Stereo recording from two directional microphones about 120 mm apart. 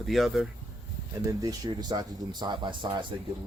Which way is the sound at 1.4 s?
35° right (ahead or behind).